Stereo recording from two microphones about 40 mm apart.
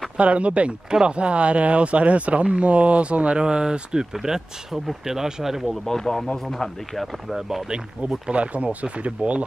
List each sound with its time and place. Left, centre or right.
0.2 s speech: right; by 5.7 s centre
5.9 s speech: centre
7.3 s speech: centre
8.3 s speech: right